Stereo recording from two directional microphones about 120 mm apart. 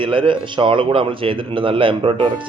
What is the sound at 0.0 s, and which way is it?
A man's voice, 45° right (ahead or behind).